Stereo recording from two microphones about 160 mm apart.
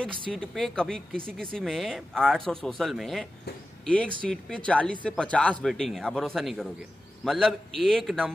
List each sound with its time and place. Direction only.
0.3 s speech: 5° left (ahead or behind)